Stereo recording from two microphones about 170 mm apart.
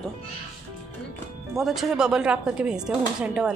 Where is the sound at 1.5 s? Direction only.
Centre (ahead or behind).